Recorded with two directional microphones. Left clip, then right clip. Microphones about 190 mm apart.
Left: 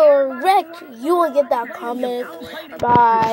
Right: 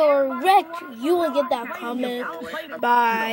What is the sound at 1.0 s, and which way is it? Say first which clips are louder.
Speech: left 5 dB; 25° right (ahead or behind).